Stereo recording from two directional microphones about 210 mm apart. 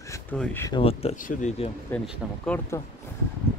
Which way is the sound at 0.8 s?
30° left (ahead or behind).